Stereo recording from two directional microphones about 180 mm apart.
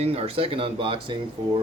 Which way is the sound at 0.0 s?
35° right (ahead or behind).